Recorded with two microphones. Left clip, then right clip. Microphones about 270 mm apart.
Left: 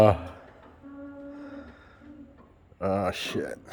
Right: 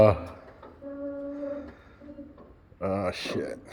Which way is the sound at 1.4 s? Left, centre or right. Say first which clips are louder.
Right 8 dB; centre.